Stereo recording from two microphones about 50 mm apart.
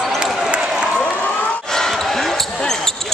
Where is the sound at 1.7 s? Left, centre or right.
Centre.